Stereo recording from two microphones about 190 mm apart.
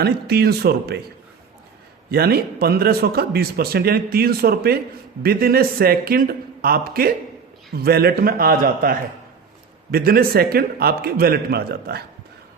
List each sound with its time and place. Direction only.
0.0 s a man's voice: 55° right (ahead or behind)
2.0 s a man's voice: 55° right (ahead or behind)